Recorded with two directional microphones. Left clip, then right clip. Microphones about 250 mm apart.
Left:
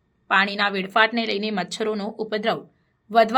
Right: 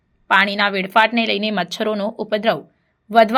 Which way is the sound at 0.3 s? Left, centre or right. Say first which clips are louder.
Right 5 dB; centre.